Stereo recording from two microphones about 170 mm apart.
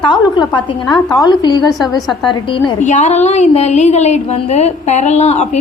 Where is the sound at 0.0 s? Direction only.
25° left (ahead or behind).